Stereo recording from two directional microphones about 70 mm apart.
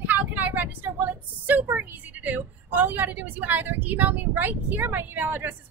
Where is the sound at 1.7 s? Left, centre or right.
Right.